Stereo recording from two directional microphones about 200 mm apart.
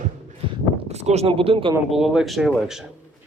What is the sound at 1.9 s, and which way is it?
Speech, centre (ahead or behind).